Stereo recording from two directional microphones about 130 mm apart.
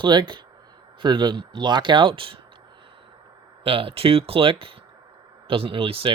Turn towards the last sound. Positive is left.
turn(degrees=-45)  # may be behind; listen again after turning